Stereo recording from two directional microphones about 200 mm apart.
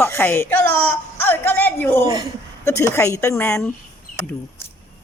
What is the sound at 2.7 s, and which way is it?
Speech, 15° left (ahead or behind).